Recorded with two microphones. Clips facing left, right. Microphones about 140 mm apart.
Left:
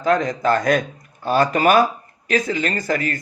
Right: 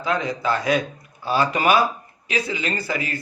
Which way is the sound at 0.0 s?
45° left (ahead or behind).